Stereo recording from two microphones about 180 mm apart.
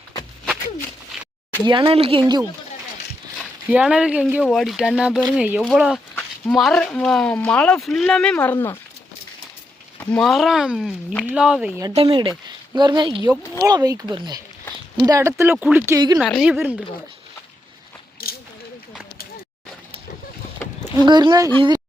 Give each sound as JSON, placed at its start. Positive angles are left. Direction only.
{"t": 1.1, "sound": "a sound", "side_deg": 0}
{"t": 1.6, "sound": "speech", "side_deg": -30}
{"t": 2.2, "sound": "speech", "side_deg": -20}
{"t": 3.3, "sound": "speech", "side_deg": -5}
{"t": 10.1, "sound": "speech", "side_deg": 0}
{"t": 11.9, "sound": "speech", "side_deg": -30}
{"t": 18.2, "sound": "a sound", "side_deg": 60}
{"t": 21.0, "sound": "speech", "side_deg": -25}